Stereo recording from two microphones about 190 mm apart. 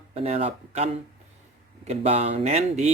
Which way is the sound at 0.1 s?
35° right (ahead or behind).